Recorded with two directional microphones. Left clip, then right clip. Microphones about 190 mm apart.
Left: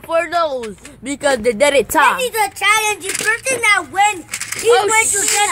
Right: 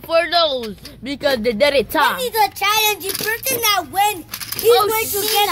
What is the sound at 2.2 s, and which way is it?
Speech, 5° right (ahead or behind).